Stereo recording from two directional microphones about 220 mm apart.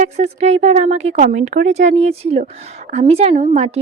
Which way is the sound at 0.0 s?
30° right (ahead or behind).